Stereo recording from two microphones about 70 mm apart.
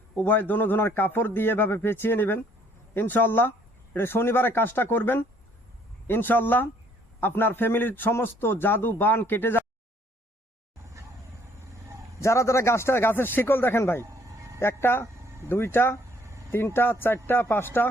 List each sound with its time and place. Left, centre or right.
0.2 s a man's voice: left
12.2 s a man's voice: left
14.0 s music: right
14.6 s a man's voice: left